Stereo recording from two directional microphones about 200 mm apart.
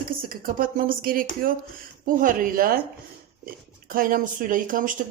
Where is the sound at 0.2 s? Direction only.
45° right (ahead or behind).